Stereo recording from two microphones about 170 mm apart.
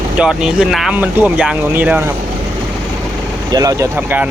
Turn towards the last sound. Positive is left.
turn(degrees=-10)  # may be behind; listen again after turning